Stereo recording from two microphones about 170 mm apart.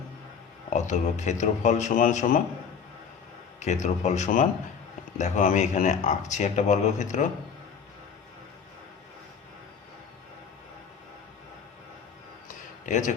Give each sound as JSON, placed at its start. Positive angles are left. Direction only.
{"t": 0.7, "sound": "speech", "side_deg": 45}
{"t": 3.6, "sound": "speech", "side_deg": 45}
{"t": 12.8, "sound": "a man's voice", "side_deg": 45}